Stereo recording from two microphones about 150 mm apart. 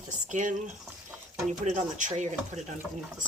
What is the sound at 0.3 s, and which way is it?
Speech, 55° right (ahead or behind).